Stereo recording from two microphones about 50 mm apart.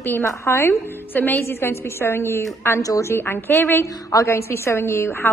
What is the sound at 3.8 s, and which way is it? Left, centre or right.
Speech, left.